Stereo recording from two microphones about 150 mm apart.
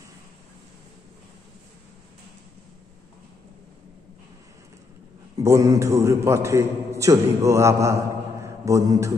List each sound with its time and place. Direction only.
5.4 s a man's voice: 20° right (ahead or behind)